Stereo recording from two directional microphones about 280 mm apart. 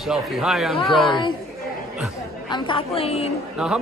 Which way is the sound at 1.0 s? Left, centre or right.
Centre.